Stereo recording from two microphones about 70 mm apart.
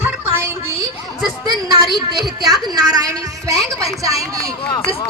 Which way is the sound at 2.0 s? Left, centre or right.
Right.